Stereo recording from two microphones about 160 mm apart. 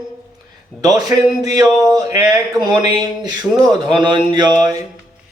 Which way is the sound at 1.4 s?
25° right (ahead or behind).